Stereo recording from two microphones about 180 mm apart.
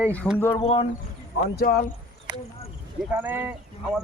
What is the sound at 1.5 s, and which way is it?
Speech, 55° left (ahead or behind).